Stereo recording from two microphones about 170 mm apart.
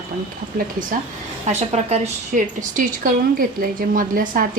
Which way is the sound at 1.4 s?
40° right (ahead or behind).